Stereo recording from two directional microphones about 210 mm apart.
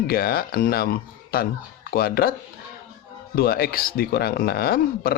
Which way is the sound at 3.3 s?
45° left (ahead or behind).